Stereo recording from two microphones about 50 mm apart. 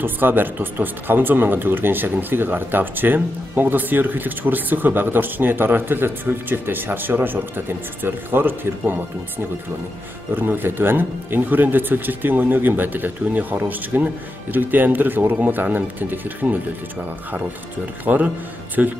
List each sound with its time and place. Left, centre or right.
0.0 s speech: right
10.3 s speech: right
18.0 s speech: right